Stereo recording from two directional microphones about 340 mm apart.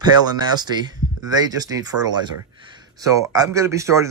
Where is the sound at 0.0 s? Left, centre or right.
Centre.